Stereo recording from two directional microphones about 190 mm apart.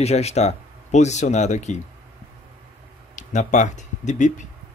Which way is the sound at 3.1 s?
40° left (ahead or behind).